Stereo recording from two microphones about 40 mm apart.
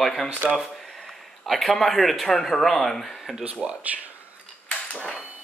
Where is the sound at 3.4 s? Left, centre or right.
Right.